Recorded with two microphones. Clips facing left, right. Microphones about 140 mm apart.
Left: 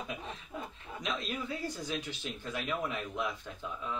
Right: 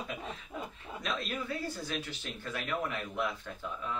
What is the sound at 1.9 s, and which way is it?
A man's voice, 15° left (ahead or behind).